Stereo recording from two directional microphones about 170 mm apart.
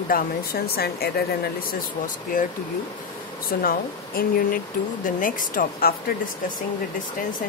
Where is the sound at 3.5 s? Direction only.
60° left (ahead or behind).